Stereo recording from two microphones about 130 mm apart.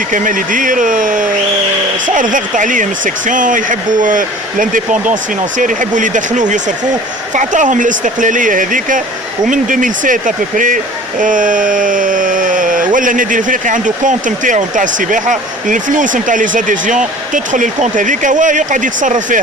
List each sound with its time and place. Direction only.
0.1 s speech: 90° right